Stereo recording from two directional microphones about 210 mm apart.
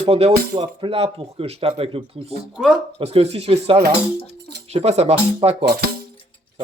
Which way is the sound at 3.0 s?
30° right (ahead or behind).